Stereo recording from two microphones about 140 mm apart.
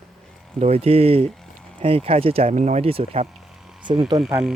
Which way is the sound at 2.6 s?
60° right (ahead or behind).